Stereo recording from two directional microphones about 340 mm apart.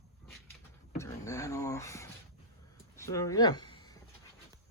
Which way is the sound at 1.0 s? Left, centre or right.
Centre.